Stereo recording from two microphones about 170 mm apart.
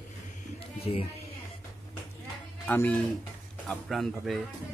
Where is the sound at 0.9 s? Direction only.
40° left (ahead or behind).